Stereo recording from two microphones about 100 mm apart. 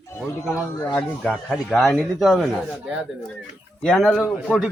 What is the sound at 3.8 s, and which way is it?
Speech, 5° left (ahead or behind).